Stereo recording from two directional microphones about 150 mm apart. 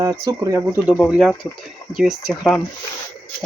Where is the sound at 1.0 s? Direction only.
5° right (ahead or behind).